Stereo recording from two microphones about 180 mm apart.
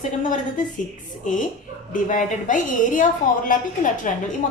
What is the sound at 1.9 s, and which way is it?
A woman's voice, 45° left (ahead or behind).